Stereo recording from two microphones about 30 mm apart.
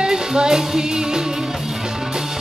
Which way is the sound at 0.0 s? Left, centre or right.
Right.